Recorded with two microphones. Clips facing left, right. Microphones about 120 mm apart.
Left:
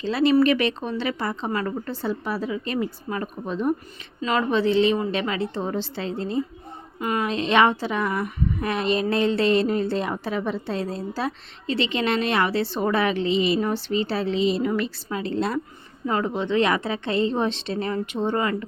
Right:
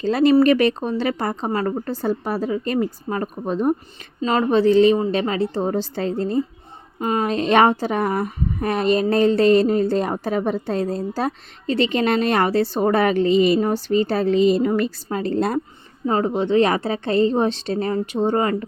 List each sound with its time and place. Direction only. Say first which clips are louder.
0.0 s a woman's voice: right 4 dB; 45° right (ahead or behind)
7.0 s speech: right 4 dB; 30° right (ahead or behind)
16.0 s a woman's voice: right 4 dB; 35° right (ahead or behind)